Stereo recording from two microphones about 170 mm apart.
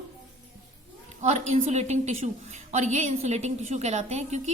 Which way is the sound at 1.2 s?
45° right (ahead or behind).